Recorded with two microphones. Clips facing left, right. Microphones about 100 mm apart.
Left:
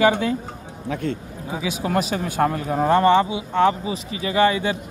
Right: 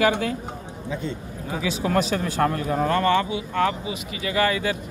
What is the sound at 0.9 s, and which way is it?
Speech, 65° left (ahead or behind).